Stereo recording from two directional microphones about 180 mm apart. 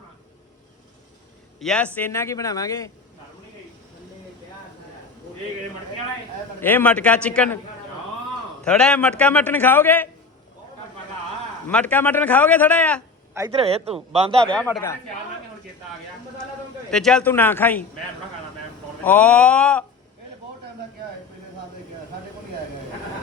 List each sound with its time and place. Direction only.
1.5 s a man's voice: 5° left (ahead or behind)
6.6 s a man's voice: 10° left (ahead or behind)
8.6 s a man's voice: 5° left (ahead or behind)
11.7 s a man's voice: 10° left (ahead or behind)
13.6 s a man's voice: 35° right (ahead or behind)
14.4 s a man's voice: 5° left (ahead or behind)
14.7 s a man's voice: 15° left (ahead or behind)
16.9 s a man's voice: 5° left (ahead or behind)
19.0 s a man's voice: 10° left (ahead or behind)